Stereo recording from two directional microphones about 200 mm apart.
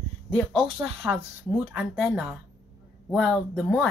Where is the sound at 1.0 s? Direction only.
10° right (ahead or behind).